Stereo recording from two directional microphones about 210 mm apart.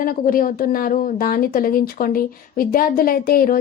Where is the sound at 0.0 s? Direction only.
40° left (ahead or behind).